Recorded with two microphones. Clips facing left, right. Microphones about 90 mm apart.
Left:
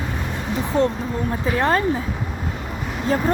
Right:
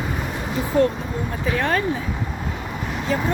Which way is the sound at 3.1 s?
40° left (ahead or behind).